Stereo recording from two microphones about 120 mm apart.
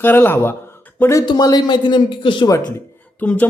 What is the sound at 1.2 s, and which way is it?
Speech, 35° left (ahead or behind).